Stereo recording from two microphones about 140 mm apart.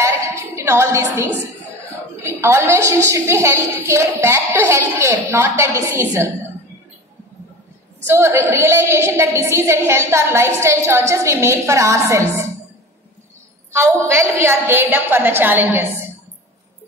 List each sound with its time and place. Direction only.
0.0 s a sound: 20° right (ahead or behind)
2.2 s a woman's voice: 20° right (ahead or behind)
8.0 s a woman's voice: 20° right (ahead or behind)
13.7 s a woman's voice: 20° right (ahead or behind)